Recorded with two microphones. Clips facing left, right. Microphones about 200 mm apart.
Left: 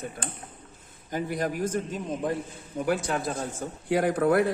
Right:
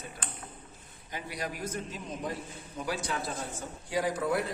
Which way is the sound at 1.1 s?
50° left (ahead or behind).